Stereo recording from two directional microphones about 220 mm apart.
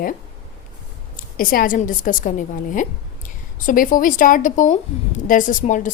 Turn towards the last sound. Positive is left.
turn(degrees=35)  # may be behind; listen again after turning